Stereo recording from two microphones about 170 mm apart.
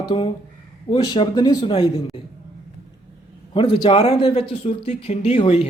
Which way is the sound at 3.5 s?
30° left (ahead or behind).